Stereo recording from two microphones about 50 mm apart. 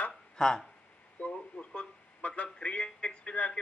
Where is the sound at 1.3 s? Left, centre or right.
Left.